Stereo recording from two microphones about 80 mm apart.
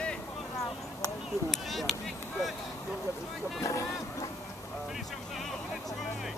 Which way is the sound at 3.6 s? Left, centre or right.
Left.